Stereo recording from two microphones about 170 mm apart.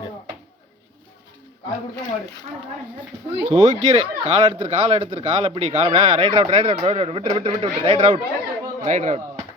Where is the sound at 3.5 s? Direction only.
30° right (ahead or behind).